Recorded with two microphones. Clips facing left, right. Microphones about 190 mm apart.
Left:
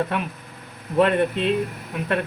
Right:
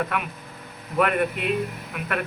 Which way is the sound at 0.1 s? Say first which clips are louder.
Left 2 dB; 30° left (ahead or behind).